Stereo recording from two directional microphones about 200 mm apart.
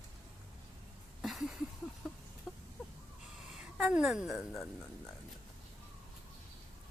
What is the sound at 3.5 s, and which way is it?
A woman's voice, 5° right (ahead or behind).